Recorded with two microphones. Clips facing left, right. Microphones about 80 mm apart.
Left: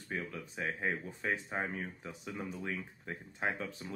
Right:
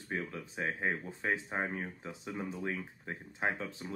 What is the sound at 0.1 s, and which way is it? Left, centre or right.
Speech, right.